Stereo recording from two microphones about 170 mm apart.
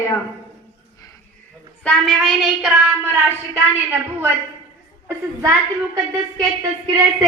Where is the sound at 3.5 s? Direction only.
10° right (ahead or behind).